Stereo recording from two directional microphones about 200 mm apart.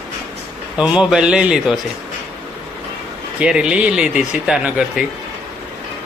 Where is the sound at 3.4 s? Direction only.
5° right (ahead or behind).